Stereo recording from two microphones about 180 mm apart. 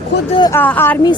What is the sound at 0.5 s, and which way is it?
Speech, 10° left (ahead or behind).